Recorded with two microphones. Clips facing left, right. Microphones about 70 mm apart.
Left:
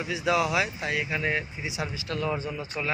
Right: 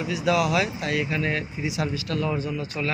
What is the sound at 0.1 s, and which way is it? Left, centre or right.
A man's voice, left.